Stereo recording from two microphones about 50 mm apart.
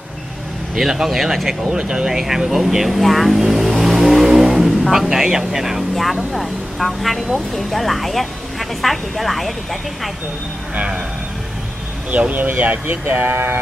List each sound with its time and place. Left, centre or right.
0.7 s speech: centre
12.1 s speech: right